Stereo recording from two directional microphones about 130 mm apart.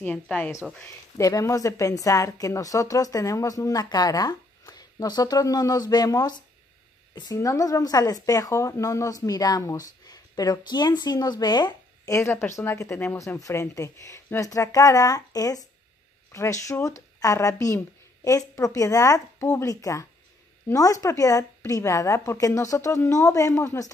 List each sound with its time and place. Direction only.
0.0 s a woman's voice: 10° left (ahead or behind); by 6.3 s 30° left (ahead or behind)
7.3 s a woman's voice: 25° left (ahead or behind)